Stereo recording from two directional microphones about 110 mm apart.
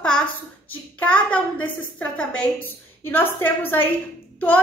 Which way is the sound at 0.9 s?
10° left (ahead or behind).